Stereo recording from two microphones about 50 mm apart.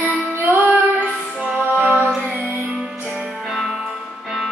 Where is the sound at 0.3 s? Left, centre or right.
Right.